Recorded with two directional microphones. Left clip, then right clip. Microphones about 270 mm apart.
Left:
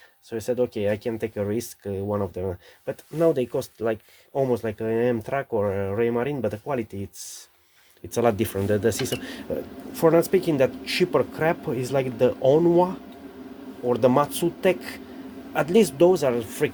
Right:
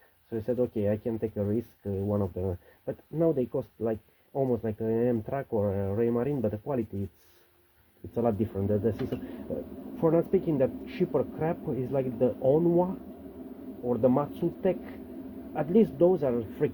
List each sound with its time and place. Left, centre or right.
0.3 s speech: centre
8.1 s speech: left